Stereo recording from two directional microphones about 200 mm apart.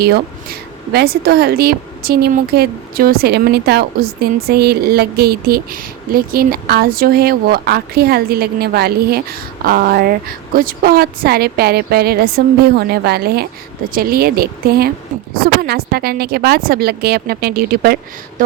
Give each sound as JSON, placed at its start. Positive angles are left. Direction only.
{"t": 0.9, "sound": "a woman's voice", "side_deg": -50}